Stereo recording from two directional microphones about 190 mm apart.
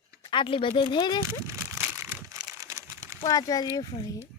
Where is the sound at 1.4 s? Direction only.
15° right (ahead or behind).